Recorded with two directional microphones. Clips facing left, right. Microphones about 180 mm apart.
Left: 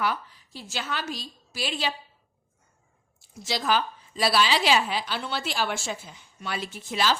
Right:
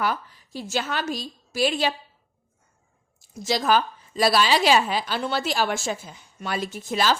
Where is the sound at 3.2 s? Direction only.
40° right (ahead or behind).